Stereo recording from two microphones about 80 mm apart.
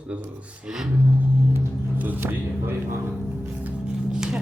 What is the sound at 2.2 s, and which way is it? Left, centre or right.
Speech, right.